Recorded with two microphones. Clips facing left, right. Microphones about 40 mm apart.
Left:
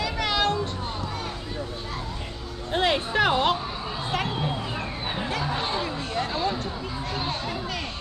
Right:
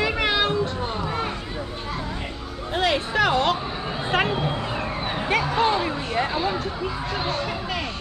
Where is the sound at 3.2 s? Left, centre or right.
Centre.